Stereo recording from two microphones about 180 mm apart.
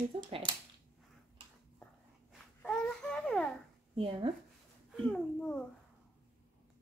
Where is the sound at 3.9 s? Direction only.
30° right (ahead or behind).